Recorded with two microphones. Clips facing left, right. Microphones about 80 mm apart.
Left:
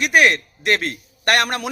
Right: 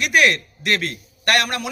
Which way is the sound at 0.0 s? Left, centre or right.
Left.